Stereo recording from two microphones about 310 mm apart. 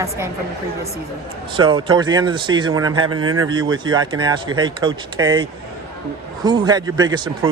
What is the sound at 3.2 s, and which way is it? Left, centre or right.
Speech, right.